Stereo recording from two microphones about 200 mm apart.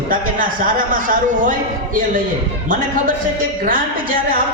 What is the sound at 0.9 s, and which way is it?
Speech, 40° right (ahead or behind).